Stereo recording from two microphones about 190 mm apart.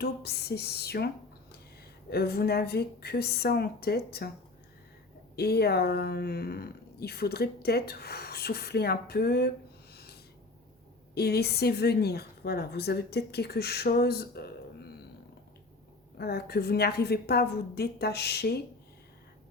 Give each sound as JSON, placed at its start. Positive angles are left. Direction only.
{"t": 0.0, "sound": "speech", "side_deg": 55}
{"t": 5.4, "sound": "speech", "side_deg": 55}
{"t": 9.9, "sound": "snort", "side_deg": 55}
{"t": 11.1, "sound": "speech", "side_deg": 55}
{"t": 16.1, "sound": "speech", "side_deg": 55}